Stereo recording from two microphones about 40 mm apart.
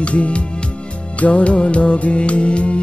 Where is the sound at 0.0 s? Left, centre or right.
Left.